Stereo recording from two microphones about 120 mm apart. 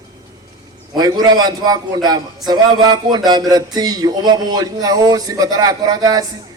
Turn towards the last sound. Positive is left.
turn(degrees=-35)  # may be behind; listen again after turning